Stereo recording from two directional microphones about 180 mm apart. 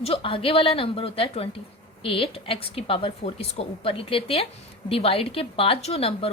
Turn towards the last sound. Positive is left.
turn(degrees=35)  # may be behind; listen again after turning